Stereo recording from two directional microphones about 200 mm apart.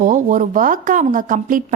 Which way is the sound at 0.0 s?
40° right (ahead or behind).